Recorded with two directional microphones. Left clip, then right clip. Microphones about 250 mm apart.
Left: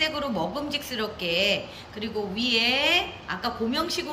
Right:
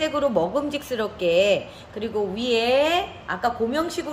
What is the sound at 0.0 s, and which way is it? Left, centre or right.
A woman's voice, right.